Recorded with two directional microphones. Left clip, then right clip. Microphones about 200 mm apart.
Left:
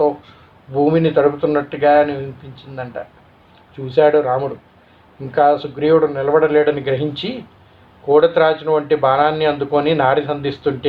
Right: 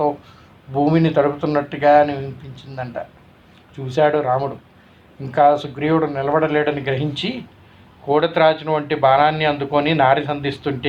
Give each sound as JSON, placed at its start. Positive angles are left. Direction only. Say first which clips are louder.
{"t": 0.7, "sound": "speech", "louder": "left 3 dB", "side_deg": -30}
{"t": 3.9, "sound": "speech", "louder": "left 3 dB", "side_deg": -25}